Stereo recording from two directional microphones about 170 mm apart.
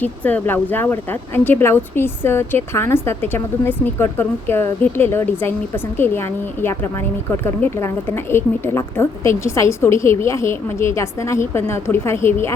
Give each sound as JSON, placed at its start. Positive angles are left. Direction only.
{"t": 0.0, "sound": "speech", "side_deg": 10}